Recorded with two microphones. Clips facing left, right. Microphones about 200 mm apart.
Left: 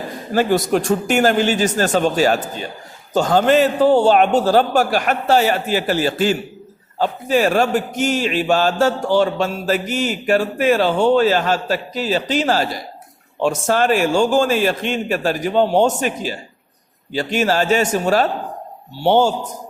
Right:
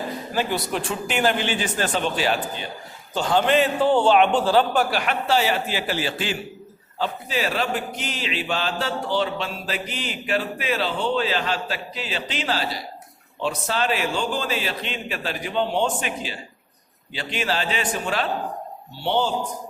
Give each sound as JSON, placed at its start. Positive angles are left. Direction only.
{"t": 0.3, "sound": "a man's voice", "side_deg": 45}